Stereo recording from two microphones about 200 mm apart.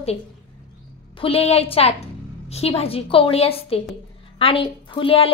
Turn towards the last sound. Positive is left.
turn(degrees=30)  # may be behind; listen again after turning